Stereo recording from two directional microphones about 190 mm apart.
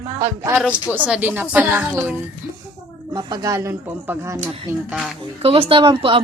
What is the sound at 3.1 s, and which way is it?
A woman's voice, 20° right (ahead or behind).